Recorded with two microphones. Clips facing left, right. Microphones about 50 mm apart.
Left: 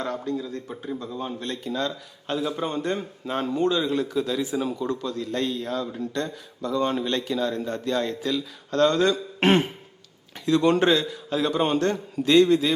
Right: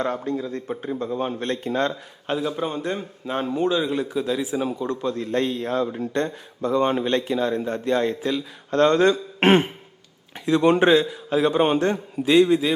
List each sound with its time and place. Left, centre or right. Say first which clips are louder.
0.3 s a man's voice: right 3 dB; right
1.9 s a man's voice: right 3 dB; centre
2.4 s a man's voice: left 1 dB; centre
4.9 s a man's voice: right 4 dB; right; by 12.7 s centre